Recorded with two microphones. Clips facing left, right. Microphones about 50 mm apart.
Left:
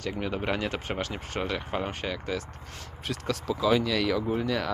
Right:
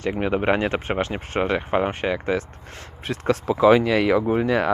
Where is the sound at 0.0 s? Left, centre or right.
Right.